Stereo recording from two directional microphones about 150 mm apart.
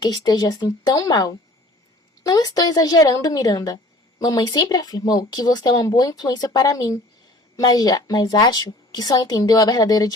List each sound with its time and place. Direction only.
0.0 s speech: 25° left (ahead or behind)